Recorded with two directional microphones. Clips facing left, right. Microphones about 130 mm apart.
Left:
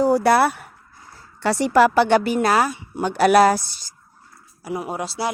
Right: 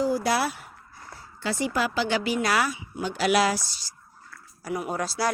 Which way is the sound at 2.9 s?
60° left (ahead or behind).